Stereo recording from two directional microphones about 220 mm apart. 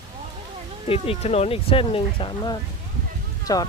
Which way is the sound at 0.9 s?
25° left (ahead or behind).